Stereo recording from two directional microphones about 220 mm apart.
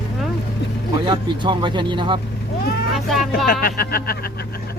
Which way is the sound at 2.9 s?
Centre (ahead or behind).